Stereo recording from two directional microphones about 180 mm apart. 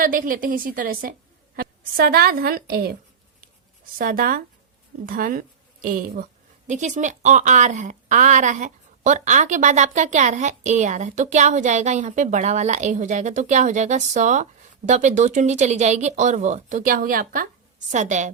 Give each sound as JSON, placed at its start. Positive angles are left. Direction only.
{"t": 0.0, "sound": "a woman's voice", "side_deg": -50}
{"t": 3.9, "sound": "speech", "side_deg": -50}